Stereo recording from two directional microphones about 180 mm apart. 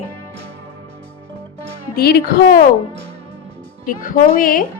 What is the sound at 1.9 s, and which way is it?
Speech, 60° left (ahead or behind).